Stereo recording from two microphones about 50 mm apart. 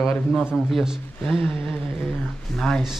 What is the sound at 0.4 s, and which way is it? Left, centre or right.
Speech, centre.